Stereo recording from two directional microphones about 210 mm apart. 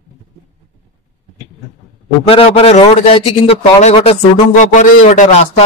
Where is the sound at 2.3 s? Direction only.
25° left (ahead or behind).